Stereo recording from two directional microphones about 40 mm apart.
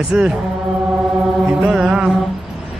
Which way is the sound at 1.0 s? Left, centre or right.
Centre.